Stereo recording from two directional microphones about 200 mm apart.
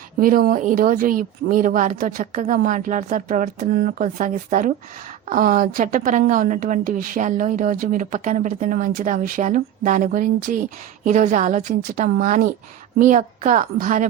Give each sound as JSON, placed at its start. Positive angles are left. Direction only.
{"t": 0.2, "sound": "a woman's voice", "side_deg": -45}